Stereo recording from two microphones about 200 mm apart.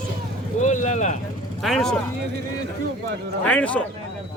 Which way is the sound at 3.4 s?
5° left (ahead or behind).